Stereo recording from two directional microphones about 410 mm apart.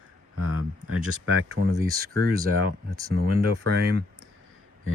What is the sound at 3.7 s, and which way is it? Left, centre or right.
Speech, right.